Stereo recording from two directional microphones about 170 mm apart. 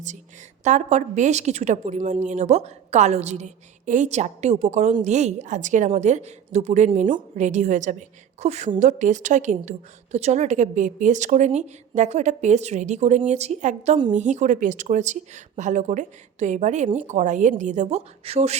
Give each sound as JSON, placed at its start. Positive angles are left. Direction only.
{"t": 0.6, "sound": "a woman's voice", "side_deg": -40}